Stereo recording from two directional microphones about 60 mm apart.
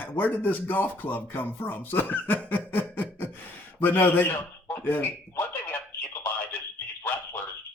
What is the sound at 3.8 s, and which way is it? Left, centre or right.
A man's voice, left.